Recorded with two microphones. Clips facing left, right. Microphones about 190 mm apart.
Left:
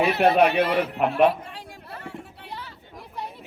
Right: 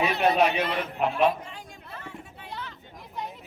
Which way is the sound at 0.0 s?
60° left (ahead or behind).